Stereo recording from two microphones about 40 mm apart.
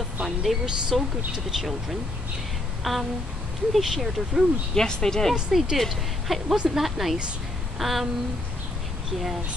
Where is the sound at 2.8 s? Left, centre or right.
Centre.